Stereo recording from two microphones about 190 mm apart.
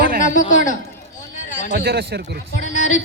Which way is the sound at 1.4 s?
40° left (ahead or behind).